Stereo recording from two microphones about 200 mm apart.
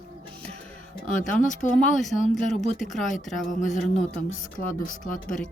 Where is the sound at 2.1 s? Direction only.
40° left (ahead or behind).